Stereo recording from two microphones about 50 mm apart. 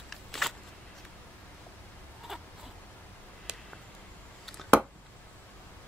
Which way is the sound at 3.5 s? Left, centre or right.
Centre.